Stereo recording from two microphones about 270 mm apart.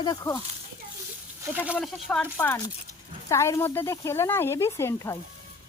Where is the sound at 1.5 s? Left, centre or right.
Centre.